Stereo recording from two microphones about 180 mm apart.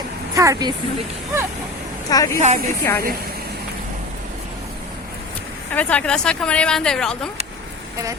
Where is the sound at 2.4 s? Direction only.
35° right (ahead or behind).